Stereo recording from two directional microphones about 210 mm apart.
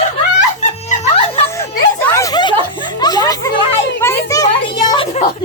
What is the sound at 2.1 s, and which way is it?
Snicker, 20° left (ahead or behind).